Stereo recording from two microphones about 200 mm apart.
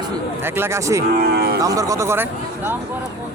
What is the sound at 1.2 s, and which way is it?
Speech, 50° right (ahead or behind).